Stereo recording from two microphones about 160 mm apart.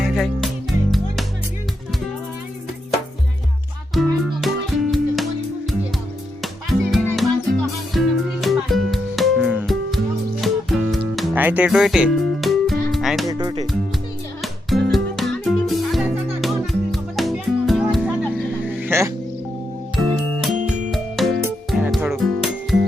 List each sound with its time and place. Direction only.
0.0 s music: centre (ahead or behind)
3.9 s music: centre (ahead or behind)
6.4 s music: centre (ahead or behind)
11.3 s music: 10° right (ahead or behind)
13.2 s speech: 25° right (ahead or behind)
14.4 s music: centre (ahead or behind)
18.3 s a sound: 10° right (ahead or behind)
20.0 s music: centre (ahead or behind)